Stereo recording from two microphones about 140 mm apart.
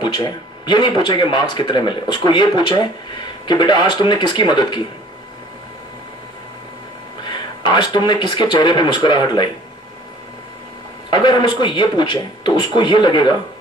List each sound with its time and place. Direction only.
0.0 s speech: 30° left (ahead or behind)
7.2 s speech: 30° left (ahead or behind)
11.1 s speech: 30° left (ahead or behind)